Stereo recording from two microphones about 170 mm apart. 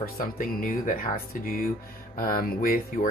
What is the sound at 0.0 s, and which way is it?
Speech, 55° left (ahead or behind).